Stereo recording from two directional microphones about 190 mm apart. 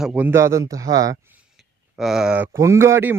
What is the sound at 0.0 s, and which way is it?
Speech, 10° right (ahead or behind).